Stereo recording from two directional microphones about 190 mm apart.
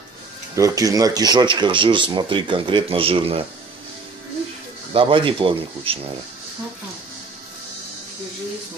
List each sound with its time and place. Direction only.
0.6 s speech: 15° right (ahead or behind)
4.9 s speech: 25° right (ahead or behind)